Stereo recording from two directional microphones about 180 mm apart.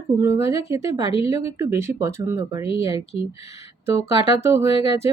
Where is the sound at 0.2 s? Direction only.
15° right (ahead or behind).